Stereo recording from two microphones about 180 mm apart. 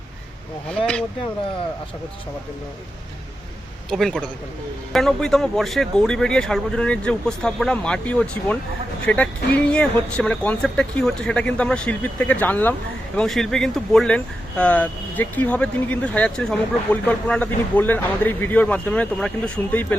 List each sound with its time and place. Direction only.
3.8 s speech: centre (ahead or behind)